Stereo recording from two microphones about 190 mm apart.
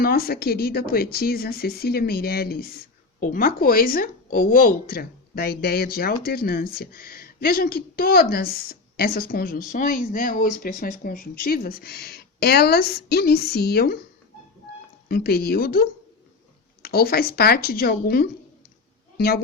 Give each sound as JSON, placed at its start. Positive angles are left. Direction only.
{"t": 0.0, "sound": "speech", "side_deg": 50}
{"t": 15.1, "sound": "a woman's voice", "side_deg": 55}